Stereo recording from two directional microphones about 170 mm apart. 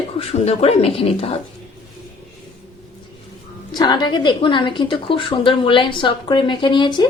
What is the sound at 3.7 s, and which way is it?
A woman's voice, 25° left (ahead or behind).